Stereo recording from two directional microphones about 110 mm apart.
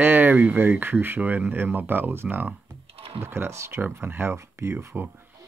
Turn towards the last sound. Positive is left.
turn(degrees=-20)  # may be behind; listen again after turning